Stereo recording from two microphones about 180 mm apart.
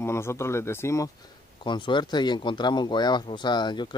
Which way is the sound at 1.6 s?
25° left (ahead or behind).